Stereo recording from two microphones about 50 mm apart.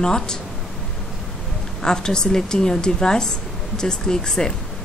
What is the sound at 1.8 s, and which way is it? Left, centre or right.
A woman's voice, centre.